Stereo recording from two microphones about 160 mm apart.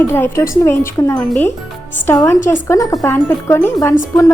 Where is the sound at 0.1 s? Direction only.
15° left (ahead or behind).